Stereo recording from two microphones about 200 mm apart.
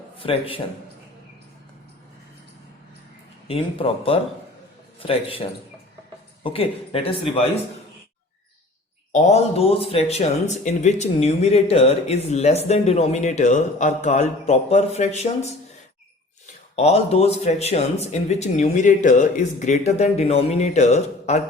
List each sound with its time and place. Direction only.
0.2 s speech: 25° left (ahead or behind)
3.4 s speech: 25° left (ahead or behind)
9.1 s speech: 35° left (ahead or behind)
16.7 s speech: 30° left (ahead or behind)